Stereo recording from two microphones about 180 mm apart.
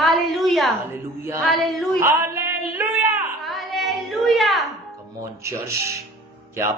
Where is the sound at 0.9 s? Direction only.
15° right (ahead or behind).